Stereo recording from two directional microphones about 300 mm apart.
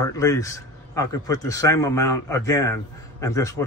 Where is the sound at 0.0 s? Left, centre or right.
Centre.